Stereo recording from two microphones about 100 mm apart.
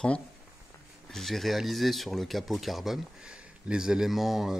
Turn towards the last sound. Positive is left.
turn(degrees=0)  # may be behind; listen again after turning